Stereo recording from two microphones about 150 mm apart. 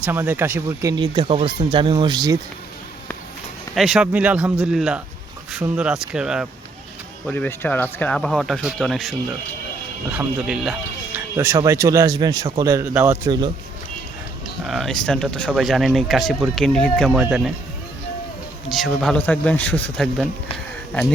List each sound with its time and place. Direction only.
0.0 s speech: 15° right (ahead or behind)
0.9 s speech: 30° right (ahead or behind)
3.8 s speech: centre (ahead or behind)
7.3 s speech: 10° left (ahead or behind)
11.3 s speech: 20° right (ahead or behind)
14.6 s speech: centre (ahead or behind)
17.1 s speech: 10° right (ahead or behind)
18.7 s speech: centre (ahead or behind)